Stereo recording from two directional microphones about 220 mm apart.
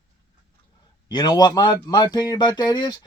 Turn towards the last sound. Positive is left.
turn(degrees=20)  # may be behind; listen again after turning